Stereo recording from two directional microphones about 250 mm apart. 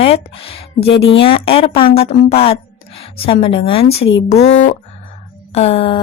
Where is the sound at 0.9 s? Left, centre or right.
Left.